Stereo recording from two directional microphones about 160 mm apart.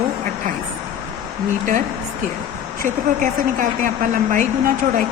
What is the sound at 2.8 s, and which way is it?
A woman's voice, 55° right (ahead or behind).